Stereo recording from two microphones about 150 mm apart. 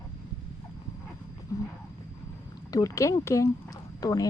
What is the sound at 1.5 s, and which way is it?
Wild animals, 20° left (ahead or behind).